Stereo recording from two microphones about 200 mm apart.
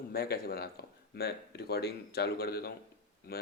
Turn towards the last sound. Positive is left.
turn(degrees=50)  # may be behind; listen again after turning